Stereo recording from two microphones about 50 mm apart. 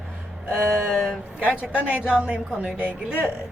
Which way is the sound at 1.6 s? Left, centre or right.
Right.